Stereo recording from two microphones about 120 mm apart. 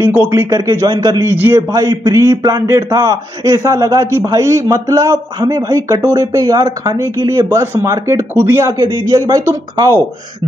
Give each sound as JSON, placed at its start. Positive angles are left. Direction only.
{"t": 0.0, "sound": "a man's voice", "side_deg": -20}
{"t": 1.3, "sound": "a man's voice", "side_deg": -15}
{"t": 1.7, "sound": "a man's voice", "side_deg": -30}